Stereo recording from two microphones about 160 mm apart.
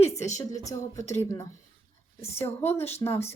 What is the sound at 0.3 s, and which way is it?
Speech, 20° left (ahead or behind).